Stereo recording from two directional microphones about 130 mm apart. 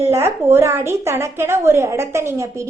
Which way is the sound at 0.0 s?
20° right (ahead or behind).